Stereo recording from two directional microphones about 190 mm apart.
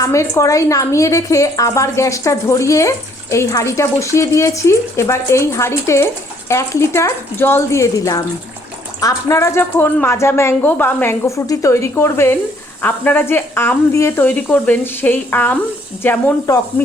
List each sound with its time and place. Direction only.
0.0 s a woman's voice: 15° left (ahead or behind)